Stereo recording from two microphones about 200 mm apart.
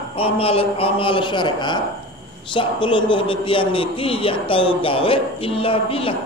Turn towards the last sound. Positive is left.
turn(degrees=25)  # may be behind; listen again after turning